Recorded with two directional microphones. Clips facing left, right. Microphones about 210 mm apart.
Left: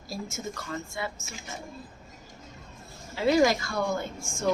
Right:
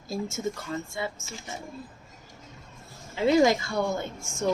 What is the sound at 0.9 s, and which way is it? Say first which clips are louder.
Speech: right 2 dB; 25° right (ahead or behind).